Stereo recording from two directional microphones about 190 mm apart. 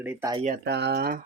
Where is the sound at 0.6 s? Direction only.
65° right (ahead or behind).